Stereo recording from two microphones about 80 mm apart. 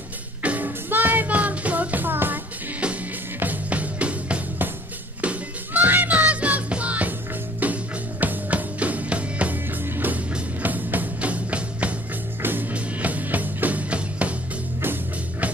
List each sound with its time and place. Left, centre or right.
0.4 s music: centre